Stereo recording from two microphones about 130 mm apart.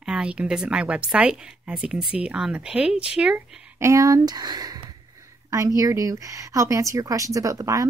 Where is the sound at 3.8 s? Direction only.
25° right (ahead or behind).